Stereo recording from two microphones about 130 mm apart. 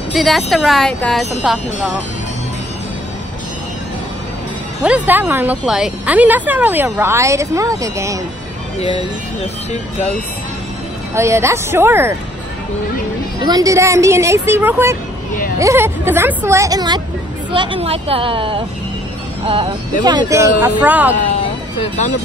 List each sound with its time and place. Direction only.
0.1 s a woman's voice: centre (ahead or behind)
4.8 s speech: 10° right (ahead or behind)
9.4 s speech: 50° left (ahead or behind)
11.1 s speech: 20° right (ahead or behind)
13.4 s speech: 30° right (ahead or behind)
17.5 s a woman's voice: 40° right (ahead or behind)
20.0 s speech: 30° right (ahead or behind); by 21.1 s 10° right (ahead or behind)